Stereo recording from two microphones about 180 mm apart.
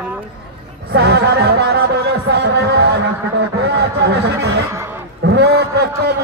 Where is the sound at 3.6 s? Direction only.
70° right (ahead or behind).